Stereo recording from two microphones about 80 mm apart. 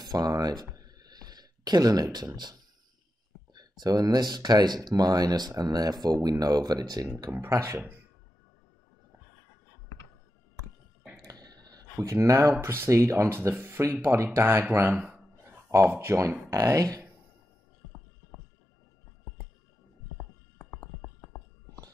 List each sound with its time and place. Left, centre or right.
0.0 s a sound: right
2.1 s speech: right
3.5 s speech: right
7.4 s speech: right
11.2 s speech: right
20.8 s a sound: left